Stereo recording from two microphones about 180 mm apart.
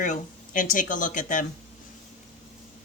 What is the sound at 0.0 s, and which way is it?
Speech, 45° left (ahead or behind).